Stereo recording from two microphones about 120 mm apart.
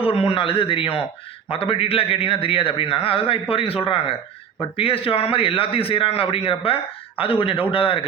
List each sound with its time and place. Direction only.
0.0 s a man's voice: 55° left (ahead or behind)